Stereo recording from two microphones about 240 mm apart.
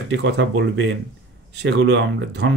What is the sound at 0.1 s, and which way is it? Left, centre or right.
Speech, right.